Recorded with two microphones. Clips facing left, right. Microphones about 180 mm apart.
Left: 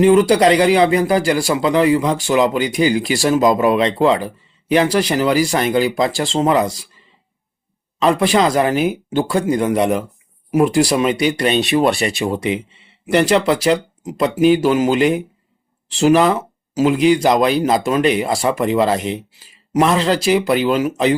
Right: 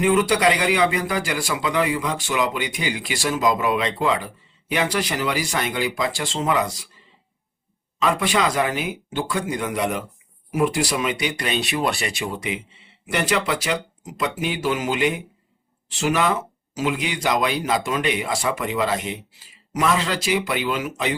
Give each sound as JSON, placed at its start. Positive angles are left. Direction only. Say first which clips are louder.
{"t": 0.0, "sound": "speech", "louder": "left 7 dB", "side_deg": 35}
{"t": 8.0, "sound": "speech", "louder": "left 7 dB", "side_deg": 35}